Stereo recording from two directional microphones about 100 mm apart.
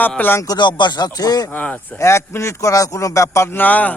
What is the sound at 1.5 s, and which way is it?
Speech, 15° left (ahead or behind).